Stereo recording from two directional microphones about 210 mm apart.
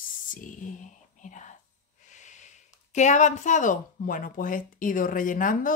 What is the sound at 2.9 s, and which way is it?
Mantra, 35° left (ahead or behind).